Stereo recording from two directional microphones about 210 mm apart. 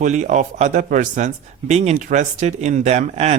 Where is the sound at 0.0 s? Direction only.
35° right (ahead or behind).